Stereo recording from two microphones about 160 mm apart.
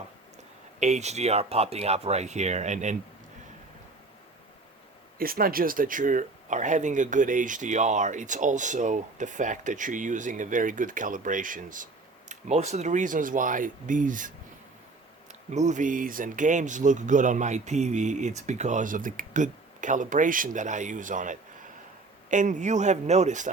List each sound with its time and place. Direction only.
0.8 s speech: 45° right (ahead or behind)
5.1 s speech: 65° right (ahead or behind)
12.3 s speech: 45° right (ahead or behind)